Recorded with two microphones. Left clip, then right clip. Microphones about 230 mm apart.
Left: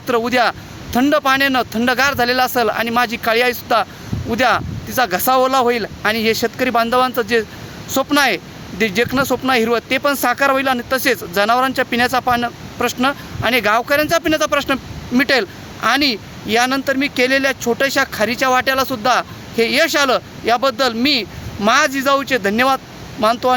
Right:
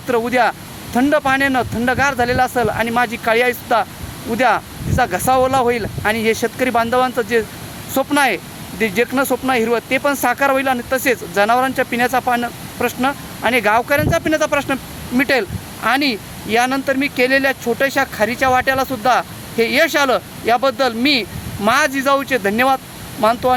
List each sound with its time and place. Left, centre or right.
0.1 s speech: centre